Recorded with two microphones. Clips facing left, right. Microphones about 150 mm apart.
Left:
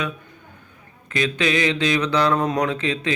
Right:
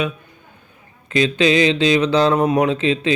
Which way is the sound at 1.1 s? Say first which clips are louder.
Right 6 dB; 25° right (ahead or behind).